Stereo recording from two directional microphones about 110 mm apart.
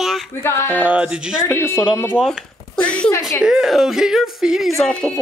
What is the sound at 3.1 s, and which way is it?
Speech, 25° left (ahead or behind).